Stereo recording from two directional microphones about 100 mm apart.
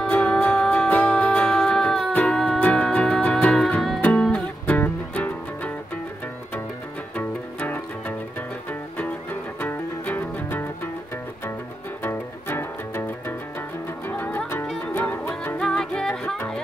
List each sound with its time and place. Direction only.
0.1 s music: 15° left (ahead or behind)
7.2 s music: 15° left (ahead or behind)
9.6 s music: 20° left (ahead or behind)
12.0 s music: 20° left (ahead or behind)
15.5 s music: 10° left (ahead or behind)